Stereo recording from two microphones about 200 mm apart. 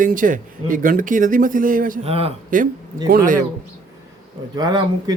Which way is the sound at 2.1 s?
30° right (ahead or behind).